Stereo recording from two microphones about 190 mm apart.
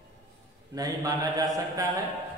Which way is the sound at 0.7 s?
20° right (ahead or behind).